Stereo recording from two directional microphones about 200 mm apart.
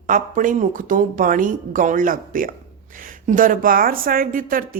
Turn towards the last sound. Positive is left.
turn(degrees=-45)  # may be behind; listen again after turning